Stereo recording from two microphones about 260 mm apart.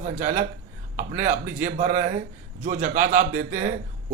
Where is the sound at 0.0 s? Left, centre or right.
Right.